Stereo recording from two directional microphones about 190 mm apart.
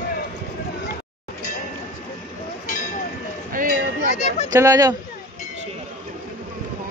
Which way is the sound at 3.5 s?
45° right (ahead or behind).